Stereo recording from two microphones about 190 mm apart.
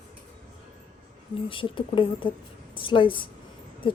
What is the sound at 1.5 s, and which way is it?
A woman's voice, 25° left (ahead or behind).